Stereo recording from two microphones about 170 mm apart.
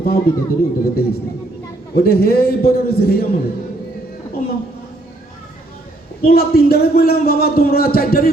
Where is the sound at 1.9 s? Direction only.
65° left (ahead or behind).